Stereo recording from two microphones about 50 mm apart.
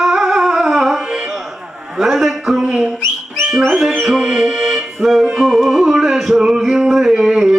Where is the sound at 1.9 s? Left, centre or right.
Centre.